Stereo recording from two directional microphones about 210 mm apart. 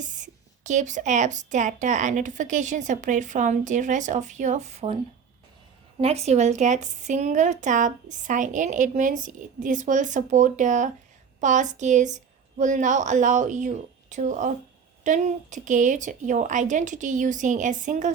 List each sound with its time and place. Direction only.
0.0 s a woman's voice: 35° right (ahead or behind)
6.0 s a woman's voice: 30° right (ahead or behind)